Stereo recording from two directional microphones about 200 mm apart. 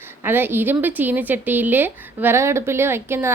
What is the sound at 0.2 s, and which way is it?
A woman's voice, 10° right (ahead or behind).